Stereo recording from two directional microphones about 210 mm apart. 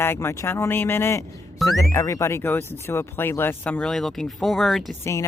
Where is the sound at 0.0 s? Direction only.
10° left (ahead or behind).